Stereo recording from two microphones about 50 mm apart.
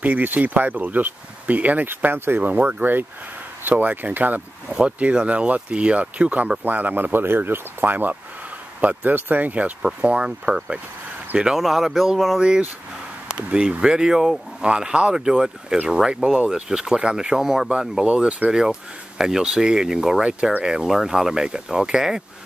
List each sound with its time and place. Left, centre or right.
0.0 s speech: right
2.1 s speech: right
4.6 s speech: centre; by 9.7 s right
10.0 s speech: centre
11.5 s speech: centre
12.4 s speech: centre
18.0 s speech: right